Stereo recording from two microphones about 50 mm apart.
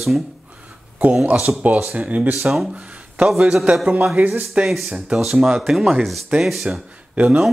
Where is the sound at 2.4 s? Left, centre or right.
Centre.